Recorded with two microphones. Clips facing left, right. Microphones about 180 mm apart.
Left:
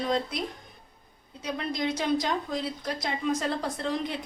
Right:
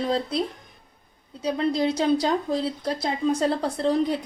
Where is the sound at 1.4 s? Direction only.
30° right (ahead or behind).